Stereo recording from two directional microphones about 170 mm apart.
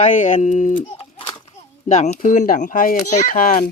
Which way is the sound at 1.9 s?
45° left (ahead or behind).